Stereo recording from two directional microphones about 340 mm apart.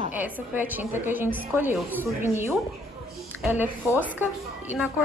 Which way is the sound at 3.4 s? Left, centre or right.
Centre.